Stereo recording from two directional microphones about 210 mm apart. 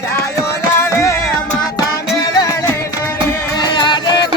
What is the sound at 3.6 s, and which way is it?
Music, 20° left (ahead or behind).